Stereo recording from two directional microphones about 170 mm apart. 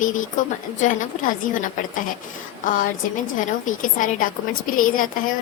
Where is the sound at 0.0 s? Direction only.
50° left (ahead or behind).